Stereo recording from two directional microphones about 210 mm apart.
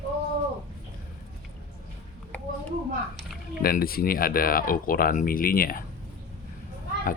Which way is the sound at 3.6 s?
45° left (ahead or behind).